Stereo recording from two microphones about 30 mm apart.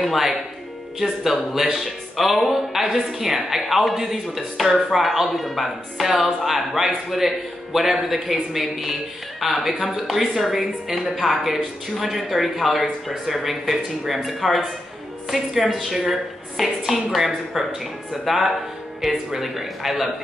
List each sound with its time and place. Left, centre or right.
0.0 s a woman's voice: centre